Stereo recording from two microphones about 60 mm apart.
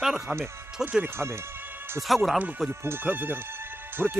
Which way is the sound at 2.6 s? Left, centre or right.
Right.